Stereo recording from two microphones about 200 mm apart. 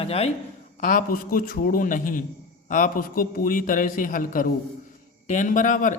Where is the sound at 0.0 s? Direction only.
30° left (ahead or behind).